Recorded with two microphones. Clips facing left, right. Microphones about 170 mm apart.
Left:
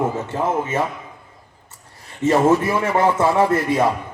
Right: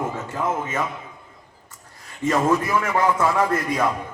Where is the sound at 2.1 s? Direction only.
30° left (ahead or behind).